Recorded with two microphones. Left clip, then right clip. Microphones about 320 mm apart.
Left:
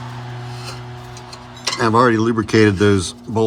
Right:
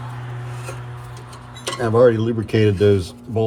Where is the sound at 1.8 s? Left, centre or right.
Centre.